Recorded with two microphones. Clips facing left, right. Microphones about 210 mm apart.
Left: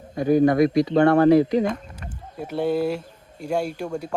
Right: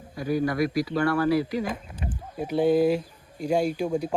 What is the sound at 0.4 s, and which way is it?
Speech, 25° left (ahead or behind).